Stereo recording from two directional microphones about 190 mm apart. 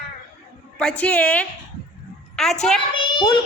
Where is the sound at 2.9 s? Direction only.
25° left (ahead or behind).